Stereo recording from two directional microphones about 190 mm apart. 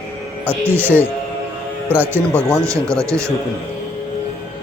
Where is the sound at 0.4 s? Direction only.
10° right (ahead or behind).